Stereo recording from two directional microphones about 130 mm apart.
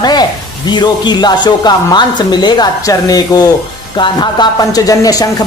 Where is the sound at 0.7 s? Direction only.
35° left (ahead or behind).